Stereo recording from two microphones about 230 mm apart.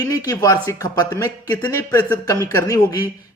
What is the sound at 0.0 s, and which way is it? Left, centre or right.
A man's voice, centre.